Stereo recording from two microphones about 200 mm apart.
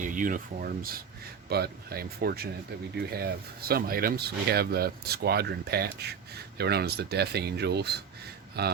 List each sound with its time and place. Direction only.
0.0 s speech: 40° right (ahead or behind)